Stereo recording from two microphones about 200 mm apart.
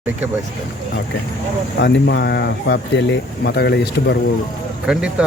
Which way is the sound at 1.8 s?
60° left (ahead or behind).